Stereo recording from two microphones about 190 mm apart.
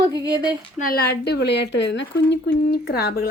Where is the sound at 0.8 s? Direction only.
55° left (ahead or behind).